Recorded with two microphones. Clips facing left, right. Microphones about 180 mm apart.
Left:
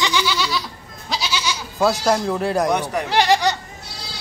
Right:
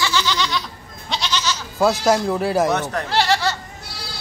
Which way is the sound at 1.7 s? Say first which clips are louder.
Right 1 dB; centre (ahead or behind).